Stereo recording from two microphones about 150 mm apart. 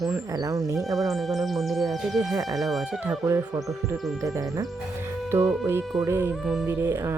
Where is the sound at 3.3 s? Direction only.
20° right (ahead or behind).